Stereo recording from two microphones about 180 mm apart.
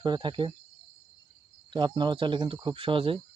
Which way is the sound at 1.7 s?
25° right (ahead or behind).